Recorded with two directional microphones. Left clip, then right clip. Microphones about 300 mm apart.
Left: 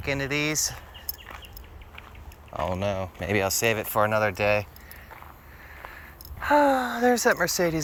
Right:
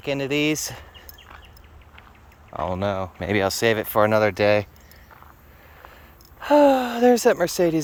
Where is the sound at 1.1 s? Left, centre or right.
Left.